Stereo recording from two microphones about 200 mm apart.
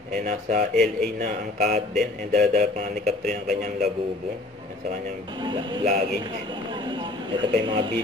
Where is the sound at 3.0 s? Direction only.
Centre (ahead or behind).